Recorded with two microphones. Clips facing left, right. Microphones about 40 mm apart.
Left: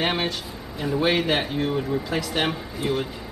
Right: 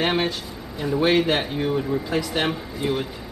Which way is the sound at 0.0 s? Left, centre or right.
Centre.